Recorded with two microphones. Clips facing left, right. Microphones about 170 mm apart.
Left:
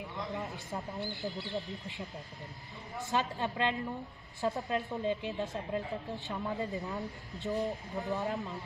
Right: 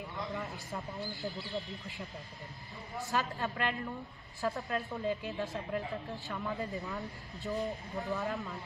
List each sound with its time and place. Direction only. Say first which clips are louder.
0.3 s speech: left 1 dB; 20° left (ahead or behind)
1.0 s speech: left 2 dB; centre (ahead or behind)
3.1 s speech: left 2 dB; 20° left (ahead or behind)
7.6 s speech: left 2 dB; centre (ahead or behind)
8.1 s speech: left 2 dB; 20° left (ahead or behind)